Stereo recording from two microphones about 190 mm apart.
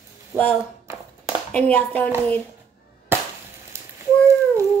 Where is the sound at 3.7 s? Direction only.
15° right (ahead or behind).